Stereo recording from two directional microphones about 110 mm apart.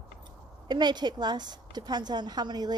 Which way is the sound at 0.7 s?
40° right (ahead or behind).